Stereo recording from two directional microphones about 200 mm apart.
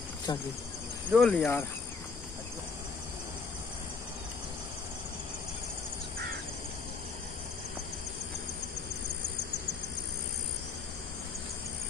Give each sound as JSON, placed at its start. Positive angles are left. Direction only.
{"t": 0.3, "sound": "speech", "side_deg": 20}
{"t": 1.1, "sound": "speech", "side_deg": 5}